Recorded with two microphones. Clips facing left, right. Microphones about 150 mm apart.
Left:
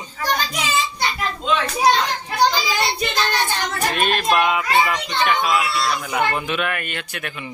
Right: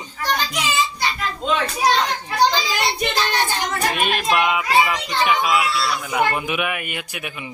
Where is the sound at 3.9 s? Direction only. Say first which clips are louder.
Left 3 dB; 5° right (ahead or behind).